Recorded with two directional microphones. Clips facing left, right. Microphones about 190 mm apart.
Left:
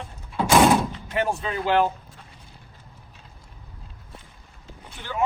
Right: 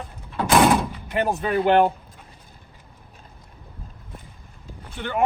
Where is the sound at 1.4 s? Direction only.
60° right (ahead or behind).